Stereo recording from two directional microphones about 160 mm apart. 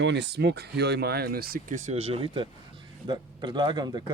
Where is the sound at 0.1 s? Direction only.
90° right.